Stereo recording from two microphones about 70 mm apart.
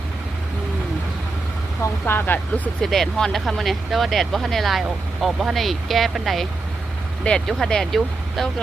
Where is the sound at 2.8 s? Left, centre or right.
Centre.